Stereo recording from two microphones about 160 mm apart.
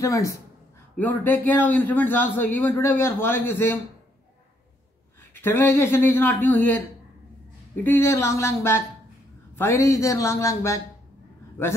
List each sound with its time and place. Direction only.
0.0 s a man's voice: 20° left (ahead or behind)
5.3 s a man's voice: 15° left (ahead or behind)
7.8 s a man's voice: 15° left (ahead or behind)